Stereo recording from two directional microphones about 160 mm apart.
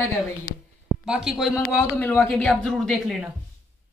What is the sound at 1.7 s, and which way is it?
A woman's voice, 10° left (ahead or behind).